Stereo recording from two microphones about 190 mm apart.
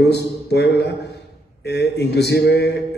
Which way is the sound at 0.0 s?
60° left (ahead or behind).